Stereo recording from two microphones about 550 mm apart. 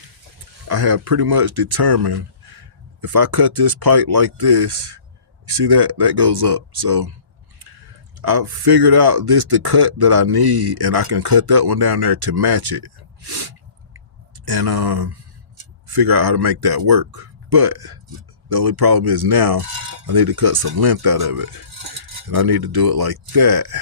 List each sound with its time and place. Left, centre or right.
0.7 s speech: right
5.6 s speech: right
8.2 s speech: right